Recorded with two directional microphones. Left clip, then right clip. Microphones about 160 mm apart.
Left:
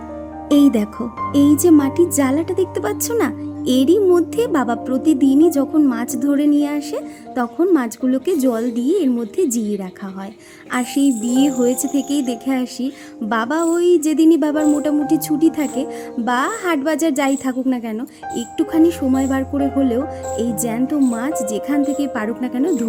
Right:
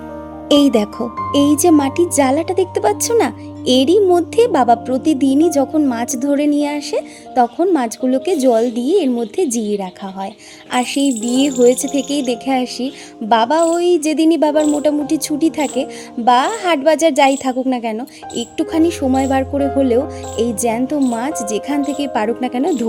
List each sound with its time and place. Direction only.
0.6 s speech: 25° right (ahead or behind)